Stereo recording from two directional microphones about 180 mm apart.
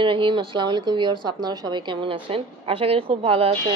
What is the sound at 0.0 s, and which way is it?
A woman's voice, 30° right (ahead or behind).